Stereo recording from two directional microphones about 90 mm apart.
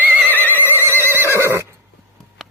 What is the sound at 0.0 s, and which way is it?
Neigh, 20° right (ahead or behind).